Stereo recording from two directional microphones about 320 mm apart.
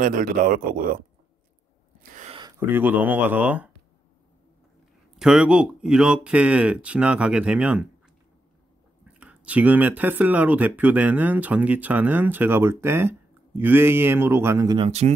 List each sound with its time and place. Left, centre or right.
0.0 s speech: right
2.1 s speech: centre
5.1 s speech: centre
9.0 s speech: centre